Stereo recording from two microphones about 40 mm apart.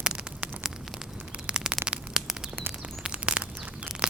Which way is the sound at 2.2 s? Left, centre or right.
Centre.